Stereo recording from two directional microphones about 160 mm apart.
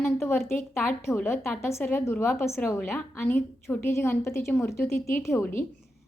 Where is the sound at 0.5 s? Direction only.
15° left (ahead or behind).